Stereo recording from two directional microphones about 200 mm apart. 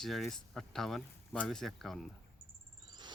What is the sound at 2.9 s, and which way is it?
Insect, 20° right (ahead or behind).